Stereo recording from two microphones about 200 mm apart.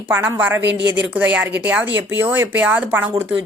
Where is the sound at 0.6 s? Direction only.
60° right (ahead or behind).